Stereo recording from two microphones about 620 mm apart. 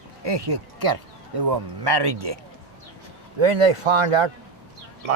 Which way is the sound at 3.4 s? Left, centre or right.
Right.